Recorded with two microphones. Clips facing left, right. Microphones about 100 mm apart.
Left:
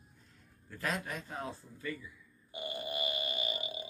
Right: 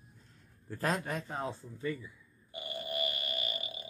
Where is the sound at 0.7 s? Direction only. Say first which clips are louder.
Right 4 dB; 35° right (ahead or behind).